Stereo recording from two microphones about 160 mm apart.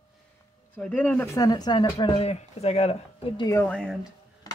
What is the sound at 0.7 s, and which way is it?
Speech, 10° left (ahead or behind).